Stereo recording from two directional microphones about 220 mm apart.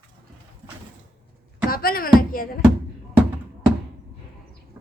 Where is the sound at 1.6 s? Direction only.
40° left (ahead or behind).